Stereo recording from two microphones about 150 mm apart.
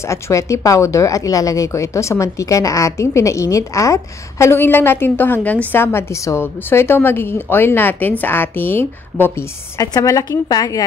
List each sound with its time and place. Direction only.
0.0 s speech: 20° left (ahead or behind)